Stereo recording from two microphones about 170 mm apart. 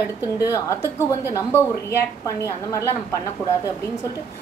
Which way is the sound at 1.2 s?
15° left (ahead or behind).